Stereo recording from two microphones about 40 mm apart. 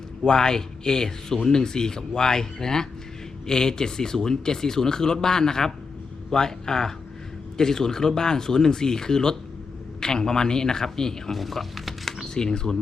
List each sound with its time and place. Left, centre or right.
0.3 s a man's voice: centre
11.3 s a sound: centre
12.3 s a man's voice: centre